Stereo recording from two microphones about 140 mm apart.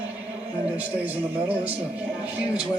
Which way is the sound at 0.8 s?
10° right (ahead or behind).